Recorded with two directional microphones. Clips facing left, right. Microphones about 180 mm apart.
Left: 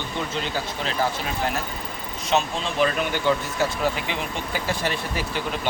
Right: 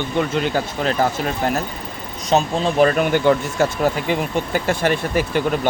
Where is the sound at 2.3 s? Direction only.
40° right (ahead or behind).